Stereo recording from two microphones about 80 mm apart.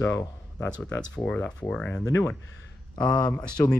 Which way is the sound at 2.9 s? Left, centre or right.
Left.